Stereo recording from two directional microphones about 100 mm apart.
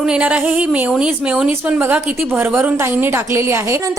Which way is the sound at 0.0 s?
10° right (ahead or behind).